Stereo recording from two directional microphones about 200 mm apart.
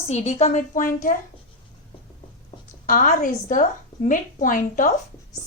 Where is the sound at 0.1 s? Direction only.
35° left (ahead or behind).